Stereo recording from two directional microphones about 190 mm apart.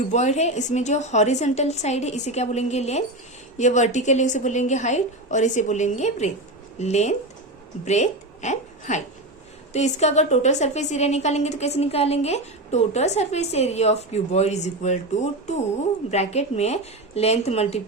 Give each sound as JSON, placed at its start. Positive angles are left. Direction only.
{"t": 0.1, "sound": "a woman's voice", "side_deg": 35}